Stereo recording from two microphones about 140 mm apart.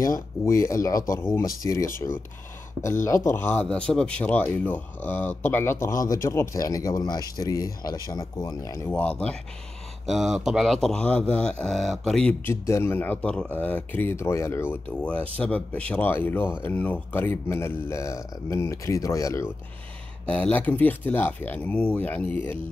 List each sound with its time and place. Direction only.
0.5 s speech: 20° left (ahead or behind)
3.6 s speech: 5° left (ahead or behind); by 8.8 s 25° left (ahead or behind)
8.8 s speech: 10° left (ahead or behind)
10.0 s speech: centre (ahead or behind)
12.6 s speech: 20° left (ahead or behind)
20.2 s speech: 10° left (ahead or behind)